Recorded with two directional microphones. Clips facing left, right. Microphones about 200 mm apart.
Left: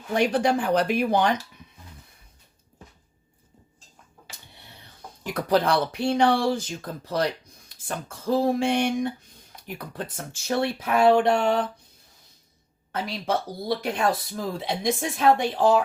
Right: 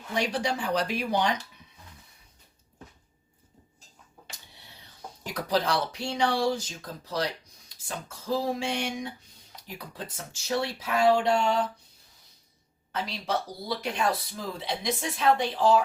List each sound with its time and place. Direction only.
0.1 s speech: 55° left (ahead or behind)
5.2 s speech: 55° left (ahead or behind)
12.9 s speech: 50° left (ahead or behind)